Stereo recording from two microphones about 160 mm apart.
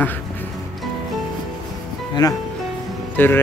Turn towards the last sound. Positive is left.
turn(degrees=15)  # may be behind; listen again after turning